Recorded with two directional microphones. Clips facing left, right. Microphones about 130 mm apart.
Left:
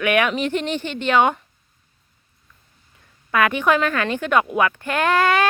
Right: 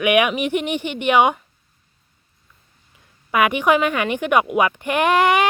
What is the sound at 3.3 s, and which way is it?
Speech, 15° right (ahead or behind).